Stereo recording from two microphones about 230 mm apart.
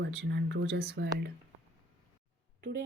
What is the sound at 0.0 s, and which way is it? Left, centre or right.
Speech, right.